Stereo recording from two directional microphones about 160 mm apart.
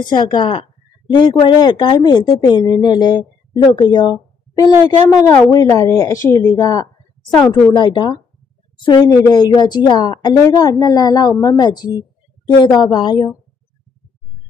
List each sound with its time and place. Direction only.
0.0 s speech: 30° left (ahead or behind)